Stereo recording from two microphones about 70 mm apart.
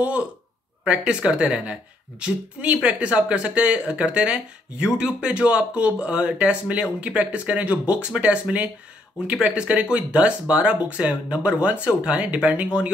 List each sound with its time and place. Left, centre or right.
0.8 s speech: centre